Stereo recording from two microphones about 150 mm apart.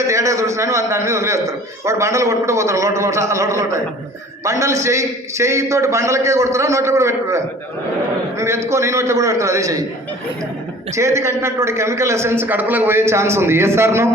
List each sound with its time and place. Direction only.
0.1 s a man's voice: 20° right (ahead or behind)
10.9 s a man's voice: 20° right (ahead or behind)